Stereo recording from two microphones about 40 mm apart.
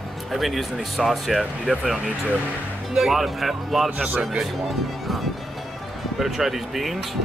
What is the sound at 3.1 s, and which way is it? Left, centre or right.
Speech, centre.